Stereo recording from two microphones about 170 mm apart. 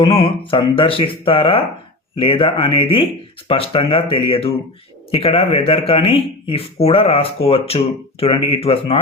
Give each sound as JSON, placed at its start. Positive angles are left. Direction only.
{"t": 0.0, "sound": "speech", "side_deg": 35}